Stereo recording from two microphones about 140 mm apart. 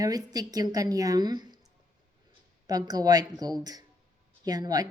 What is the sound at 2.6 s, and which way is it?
Speech, 25° right (ahead or behind).